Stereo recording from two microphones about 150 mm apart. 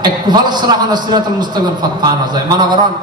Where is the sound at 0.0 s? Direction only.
30° right (ahead or behind).